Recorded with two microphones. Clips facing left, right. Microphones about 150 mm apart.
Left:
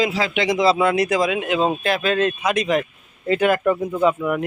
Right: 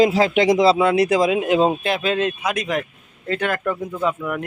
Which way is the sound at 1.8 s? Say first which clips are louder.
Left 1 dB; 20° right (ahead or behind).